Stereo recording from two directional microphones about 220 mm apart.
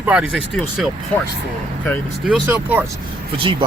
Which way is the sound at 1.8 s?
Centre (ahead or behind).